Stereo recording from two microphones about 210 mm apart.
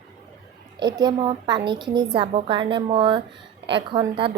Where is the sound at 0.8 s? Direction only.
20° right (ahead or behind).